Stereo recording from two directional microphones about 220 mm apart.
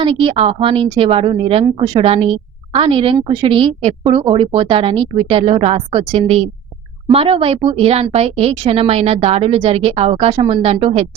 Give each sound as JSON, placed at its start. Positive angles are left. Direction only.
{"t": 0.0, "sound": "a woman's voice", "side_deg": -25}